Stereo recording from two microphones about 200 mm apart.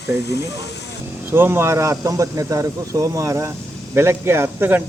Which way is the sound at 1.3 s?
10° right (ahead or behind).